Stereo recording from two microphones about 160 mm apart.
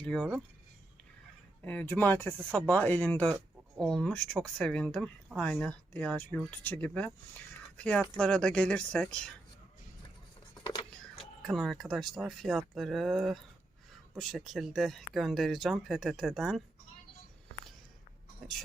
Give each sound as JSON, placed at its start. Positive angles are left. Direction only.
{"t": 0.0, "sound": "speech", "side_deg": 5}
{"t": 1.6, "sound": "speech", "side_deg": 10}
{"t": 10.7, "sound": "a sound", "side_deg": 30}
{"t": 11.4, "sound": "speech", "side_deg": 0}
{"t": 18.4, "sound": "speech", "side_deg": 0}